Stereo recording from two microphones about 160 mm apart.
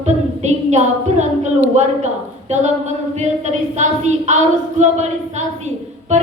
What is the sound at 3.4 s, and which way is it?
A woman's voice, 45° right (ahead or behind).